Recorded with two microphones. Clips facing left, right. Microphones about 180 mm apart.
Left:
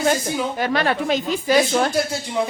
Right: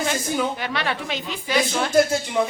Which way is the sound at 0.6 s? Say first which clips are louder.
Left 6 dB; 45° left (ahead or behind).